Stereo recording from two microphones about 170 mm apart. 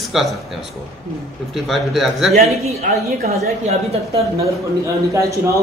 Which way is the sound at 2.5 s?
40° right (ahead or behind).